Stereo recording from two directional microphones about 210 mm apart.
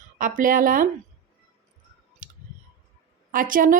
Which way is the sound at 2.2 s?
40° right (ahead or behind).